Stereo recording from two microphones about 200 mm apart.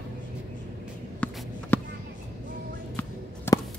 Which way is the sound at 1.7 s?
10° left (ahead or behind).